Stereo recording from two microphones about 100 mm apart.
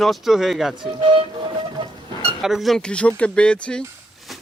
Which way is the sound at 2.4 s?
Centre (ahead or behind).